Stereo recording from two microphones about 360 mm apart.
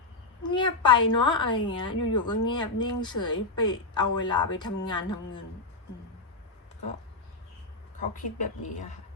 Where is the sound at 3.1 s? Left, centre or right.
Left.